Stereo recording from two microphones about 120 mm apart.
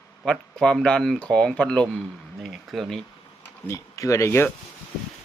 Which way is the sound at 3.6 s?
25° left (ahead or behind).